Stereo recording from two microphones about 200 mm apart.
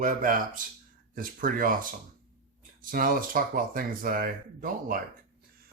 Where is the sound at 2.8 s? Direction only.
45° right (ahead or behind).